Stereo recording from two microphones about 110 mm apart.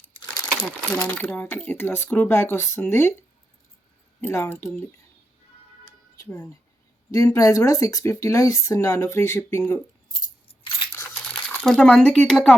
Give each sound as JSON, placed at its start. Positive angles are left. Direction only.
{"t": 1.0, "sound": "speech", "side_deg": 15}
{"t": 4.2, "sound": "speech", "side_deg": 20}
{"t": 6.2, "sound": "speech", "side_deg": 15}
{"t": 7.1, "sound": "speech", "side_deg": 30}
{"t": 10.5, "sound": "a sound", "side_deg": 55}
{"t": 11.3, "sound": "speech", "side_deg": 10}